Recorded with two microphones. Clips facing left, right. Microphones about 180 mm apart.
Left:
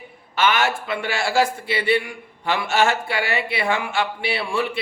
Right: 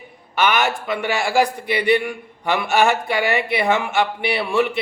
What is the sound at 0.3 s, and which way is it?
Speech, 15° right (ahead or behind).